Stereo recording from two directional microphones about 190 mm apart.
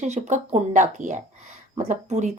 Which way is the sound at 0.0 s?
40° right (ahead or behind).